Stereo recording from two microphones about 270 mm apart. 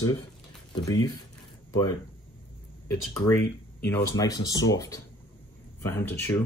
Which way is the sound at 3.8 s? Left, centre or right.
Centre.